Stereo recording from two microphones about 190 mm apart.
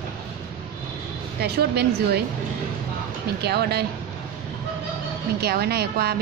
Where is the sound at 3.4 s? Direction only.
60° right (ahead or behind).